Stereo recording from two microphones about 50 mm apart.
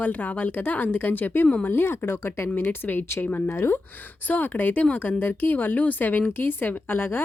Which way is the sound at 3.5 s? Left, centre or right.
Left.